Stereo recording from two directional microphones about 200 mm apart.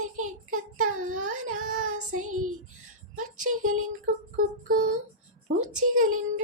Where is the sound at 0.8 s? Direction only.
90° right.